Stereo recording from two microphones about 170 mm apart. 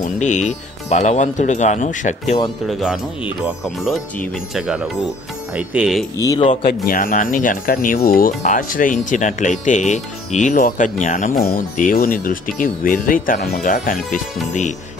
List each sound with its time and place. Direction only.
0.0 s speech: 45° left (ahead or behind)
2.7 s speech: centre (ahead or behind)
6.1 s speech: 20° left (ahead or behind)
6.9 s speech: 55° left (ahead or behind)